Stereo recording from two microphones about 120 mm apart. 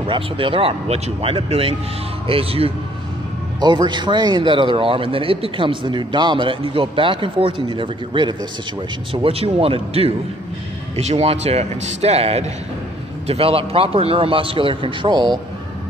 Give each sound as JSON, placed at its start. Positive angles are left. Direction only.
{"t": 0.0, "sound": "a man's voice", "side_deg": -45}
{"t": 3.6, "sound": "a man's voice", "side_deg": -40}